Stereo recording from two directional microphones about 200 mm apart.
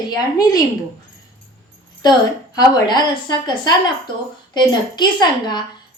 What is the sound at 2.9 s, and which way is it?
A woman's voice, 20° left (ahead or behind).